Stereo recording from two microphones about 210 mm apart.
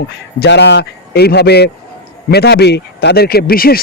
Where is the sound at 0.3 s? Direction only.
55° left (ahead or behind).